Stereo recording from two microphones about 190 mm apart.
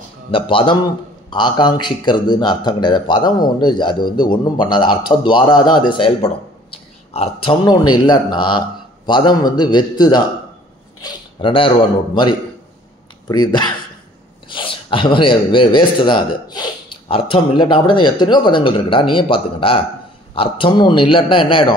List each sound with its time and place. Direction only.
0.3 s a man's voice: 25° left (ahead or behind)